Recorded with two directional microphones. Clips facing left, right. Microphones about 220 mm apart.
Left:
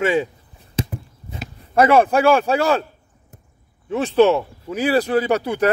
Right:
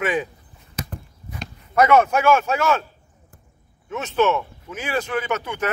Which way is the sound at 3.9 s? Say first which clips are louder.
Left 6 dB; 35° left (ahead or behind).